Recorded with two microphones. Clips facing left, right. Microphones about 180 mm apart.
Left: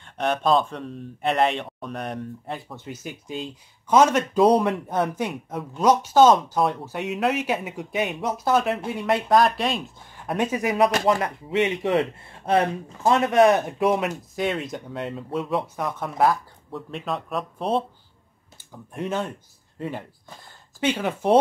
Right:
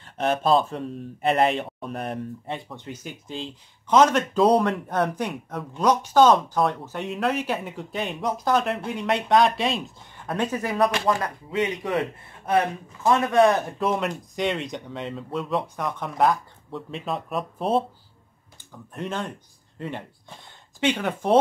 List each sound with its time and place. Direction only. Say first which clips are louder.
0.0 s speech: even; 5° right (ahead or behind); by 13.7 s 20° left (ahead or behind)
13.7 s speech: left 3 dB; 5° left (ahead or behind)
18.9 s speech: left 3 dB; 5° left (ahead or behind)